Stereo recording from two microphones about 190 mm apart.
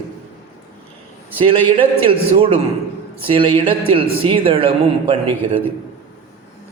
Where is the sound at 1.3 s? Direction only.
30° right (ahead or behind).